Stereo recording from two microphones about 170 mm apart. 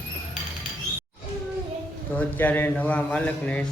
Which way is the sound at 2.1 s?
10° left (ahead or behind).